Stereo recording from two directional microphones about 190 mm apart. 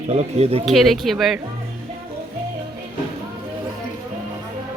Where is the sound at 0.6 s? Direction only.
Centre (ahead or behind).